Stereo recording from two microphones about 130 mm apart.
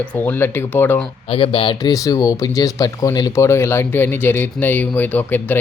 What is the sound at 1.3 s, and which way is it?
Speech, 40° left (ahead or behind).